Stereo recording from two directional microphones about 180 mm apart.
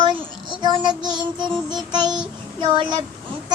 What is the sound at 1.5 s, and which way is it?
Music, centre (ahead or behind).